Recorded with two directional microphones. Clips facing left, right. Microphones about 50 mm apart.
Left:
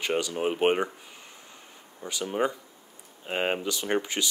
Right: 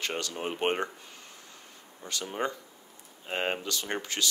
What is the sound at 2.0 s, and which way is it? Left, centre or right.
Speech, centre.